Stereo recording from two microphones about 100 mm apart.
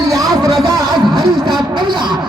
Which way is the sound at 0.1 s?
35° right (ahead or behind).